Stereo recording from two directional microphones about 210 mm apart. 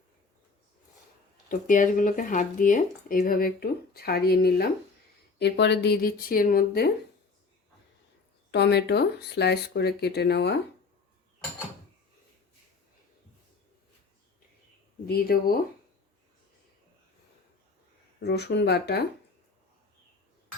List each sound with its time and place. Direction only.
1.5 s speech: 40° left (ahead or behind)
8.4 s speech: 55° left (ahead or behind)
15.0 s speech: 45° left (ahead or behind)
18.2 s speech: 50° left (ahead or behind)